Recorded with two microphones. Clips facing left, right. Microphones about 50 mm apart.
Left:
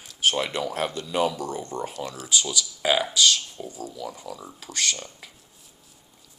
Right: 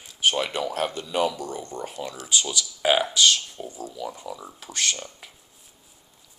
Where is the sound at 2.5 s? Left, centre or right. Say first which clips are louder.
Right 2 dB; right.